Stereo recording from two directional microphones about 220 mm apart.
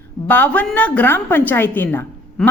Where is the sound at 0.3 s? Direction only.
5° left (ahead or behind).